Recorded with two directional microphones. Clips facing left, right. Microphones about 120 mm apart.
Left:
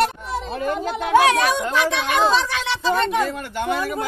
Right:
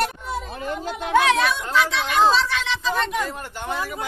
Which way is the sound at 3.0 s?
70° left (ahead or behind).